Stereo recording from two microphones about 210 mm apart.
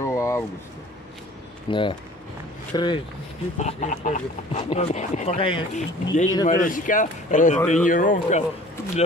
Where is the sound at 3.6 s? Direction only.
35° left (ahead or behind).